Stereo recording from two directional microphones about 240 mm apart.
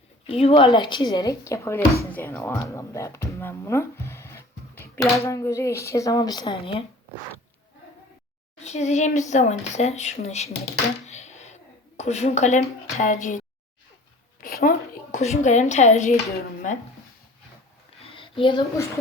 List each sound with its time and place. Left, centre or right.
0.3 s speech: left
8.6 s speech: left
14.4 s speech: left
18.0 s a sound: left